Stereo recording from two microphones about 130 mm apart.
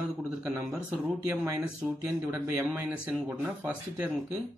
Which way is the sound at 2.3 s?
15° right (ahead or behind).